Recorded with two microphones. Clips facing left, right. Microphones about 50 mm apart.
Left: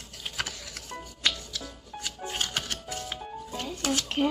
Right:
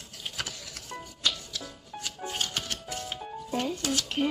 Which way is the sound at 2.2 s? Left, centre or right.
Centre.